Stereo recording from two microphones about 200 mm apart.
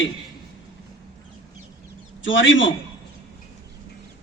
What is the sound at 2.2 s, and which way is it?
Speech, 70° left (ahead or behind).